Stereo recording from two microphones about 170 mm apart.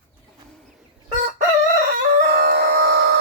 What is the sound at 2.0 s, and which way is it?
Chicken, 55° right (ahead or behind).